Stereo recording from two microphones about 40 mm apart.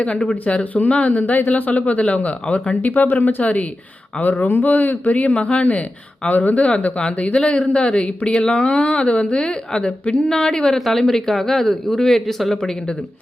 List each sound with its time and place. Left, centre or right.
0.4 s speech: left
0.9 s speech: left
1.2 s speech: left
1.5 s speech: left
2.8 s speech: left
3.4 s speech: left
4.2 s speech: left; by 10.8 s centre
10.8 s speech: centre